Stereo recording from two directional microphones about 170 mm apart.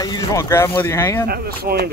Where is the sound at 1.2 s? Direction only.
65° right (ahead or behind).